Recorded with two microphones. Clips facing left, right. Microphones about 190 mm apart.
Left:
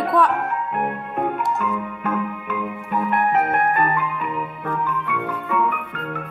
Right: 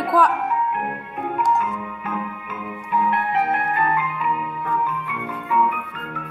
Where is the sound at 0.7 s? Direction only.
50° left (ahead or behind).